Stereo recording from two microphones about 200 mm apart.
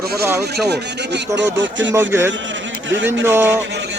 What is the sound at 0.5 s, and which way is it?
Speech, 55° right (ahead or behind).